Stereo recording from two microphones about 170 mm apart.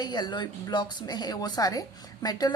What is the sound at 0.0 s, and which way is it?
A woman's voice, 25° left (ahead or behind).